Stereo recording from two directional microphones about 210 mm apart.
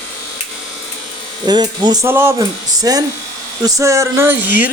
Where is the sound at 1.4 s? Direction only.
20° right (ahead or behind).